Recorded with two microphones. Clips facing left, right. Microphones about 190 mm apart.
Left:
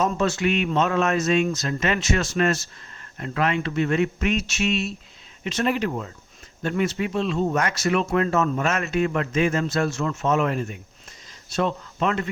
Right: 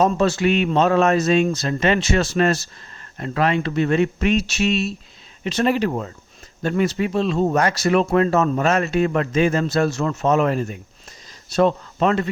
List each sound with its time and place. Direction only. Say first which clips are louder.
0.0 s speech: right 5 dB; 35° right (ahead or behind)